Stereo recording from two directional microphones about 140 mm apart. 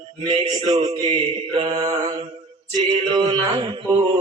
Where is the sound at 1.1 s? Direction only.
40° right (ahead or behind).